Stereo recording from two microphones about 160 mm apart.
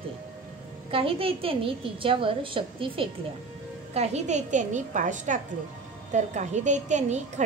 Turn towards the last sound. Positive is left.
turn(degrees=-50)  # may be behind; listen again after turning